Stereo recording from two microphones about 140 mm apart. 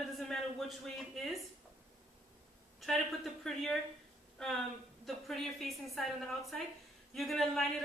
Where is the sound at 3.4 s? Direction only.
5° left (ahead or behind).